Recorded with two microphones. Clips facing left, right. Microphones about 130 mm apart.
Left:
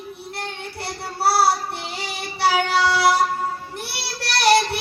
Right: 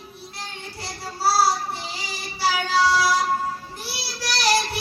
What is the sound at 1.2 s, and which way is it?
Child singing, 60° left (ahead or behind).